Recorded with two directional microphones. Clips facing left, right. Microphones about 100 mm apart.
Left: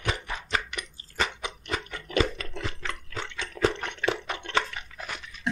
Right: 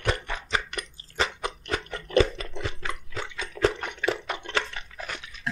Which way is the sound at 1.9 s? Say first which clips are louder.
Right 3 dB; 35° right (ahead or behind).